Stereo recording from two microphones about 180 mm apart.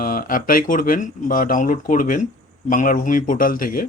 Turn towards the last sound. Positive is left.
turn(degrees=50)  # may be behind; listen again after turning